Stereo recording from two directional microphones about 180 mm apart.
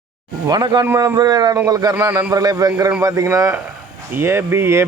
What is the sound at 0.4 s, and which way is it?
A man's voice, 25° right (ahead or behind).